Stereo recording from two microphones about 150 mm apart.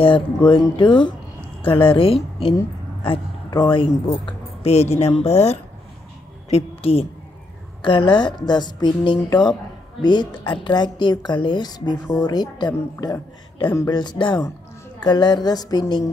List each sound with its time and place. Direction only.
0.0 s a woman's voice: 35° left (ahead or behind)
3.4 s speech: 30° left (ahead or behind)
4.6 s a woman's voice: 45° left (ahead or behind); by 16.0 s 25° left (ahead or behind)